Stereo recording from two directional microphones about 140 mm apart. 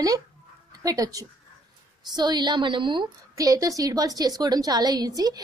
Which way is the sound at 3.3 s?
25° right (ahead or behind).